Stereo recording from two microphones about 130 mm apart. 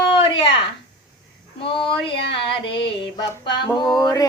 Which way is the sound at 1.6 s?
40° left (ahead or behind).